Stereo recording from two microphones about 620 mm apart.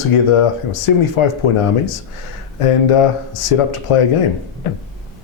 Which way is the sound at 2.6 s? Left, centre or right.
Left.